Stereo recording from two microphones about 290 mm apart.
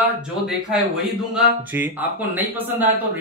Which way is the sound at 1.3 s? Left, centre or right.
Centre.